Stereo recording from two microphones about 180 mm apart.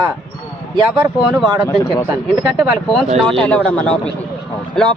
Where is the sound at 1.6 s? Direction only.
15° left (ahead or behind).